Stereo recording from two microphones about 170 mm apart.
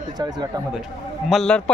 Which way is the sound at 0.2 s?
25° right (ahead or behind).